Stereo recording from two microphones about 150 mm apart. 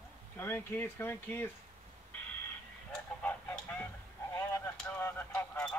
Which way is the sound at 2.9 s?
10° left (ahead or behind).